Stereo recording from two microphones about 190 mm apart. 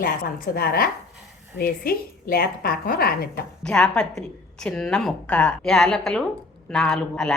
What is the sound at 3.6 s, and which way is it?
A woman's voice, 5° left (ahead or behind).